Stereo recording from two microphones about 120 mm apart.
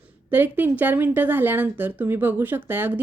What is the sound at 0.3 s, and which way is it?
A woman's voice, 15° right (ahead or behind).